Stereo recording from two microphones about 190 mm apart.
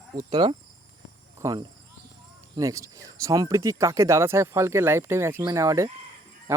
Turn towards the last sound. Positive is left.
turn(degrees=-15)  # may be behind; listen again after turning